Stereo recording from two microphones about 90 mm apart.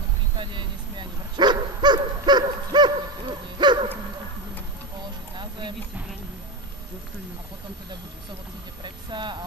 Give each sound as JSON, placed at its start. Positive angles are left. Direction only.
{"t": 0.4, "sound": "speech", "side_deg": -65}
{"t": 5.4, "sound": "music", "side_deg": -60}
{"t": 8.8, "sound": "speech", "side_deg": -60}